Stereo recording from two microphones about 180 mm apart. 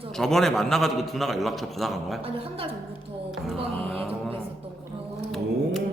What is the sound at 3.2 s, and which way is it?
Speech, 5° right (ahead or behind).